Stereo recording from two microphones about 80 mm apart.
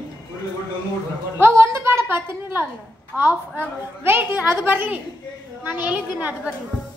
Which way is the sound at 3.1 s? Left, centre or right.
Right.